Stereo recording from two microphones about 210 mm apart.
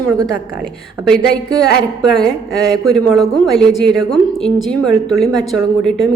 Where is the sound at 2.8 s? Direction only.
Centre (ahead or behind).